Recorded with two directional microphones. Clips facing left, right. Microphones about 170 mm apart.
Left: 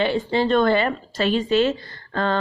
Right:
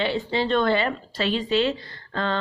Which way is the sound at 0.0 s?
50° left (ahead or behind).